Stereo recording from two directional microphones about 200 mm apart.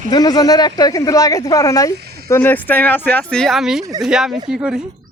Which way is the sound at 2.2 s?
10° left (ahead or behind).